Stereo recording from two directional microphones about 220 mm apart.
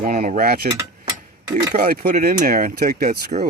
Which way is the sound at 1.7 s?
40° right (ahead or behind).